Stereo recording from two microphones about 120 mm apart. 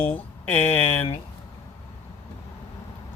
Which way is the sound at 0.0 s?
15° left (ahead or behind).